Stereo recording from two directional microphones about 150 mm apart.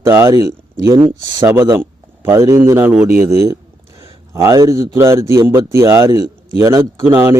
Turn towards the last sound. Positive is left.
turn(degrees=-15)  # may be behind; listen again after turning